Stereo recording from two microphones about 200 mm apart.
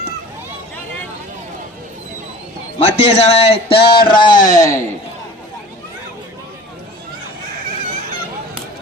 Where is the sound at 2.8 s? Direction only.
35° left (ahead or behind); by 4.8 s 15° left (ahead or behind).